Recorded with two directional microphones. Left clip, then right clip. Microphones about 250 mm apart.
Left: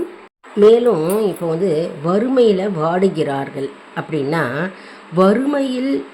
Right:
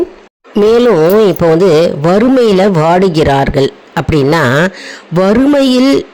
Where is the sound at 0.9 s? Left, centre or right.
Right.